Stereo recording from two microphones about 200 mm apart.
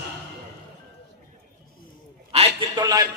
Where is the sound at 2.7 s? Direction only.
20° right (ahead or behind).